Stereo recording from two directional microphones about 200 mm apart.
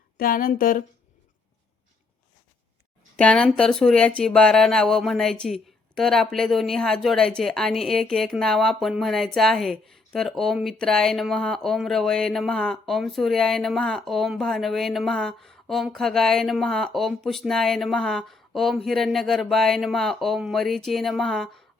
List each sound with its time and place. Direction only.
0.2 s speech: 45° left (ahead or behind)
3.2 s speech: 5° left (ahead or behind)